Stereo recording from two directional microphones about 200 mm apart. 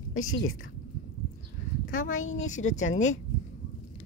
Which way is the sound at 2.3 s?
35° left (ahead or behind).